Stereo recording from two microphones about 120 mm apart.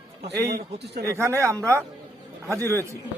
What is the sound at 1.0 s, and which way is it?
A man's voice, 25° right (ahead or behind).